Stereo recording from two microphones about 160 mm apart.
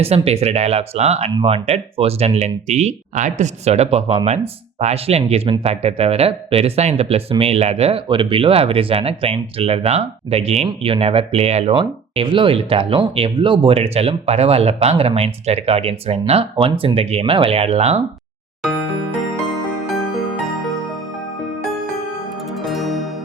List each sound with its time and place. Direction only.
0.0 s speech: 40° right (ahead or behind)
22.6 s music: centre (ahead or behind)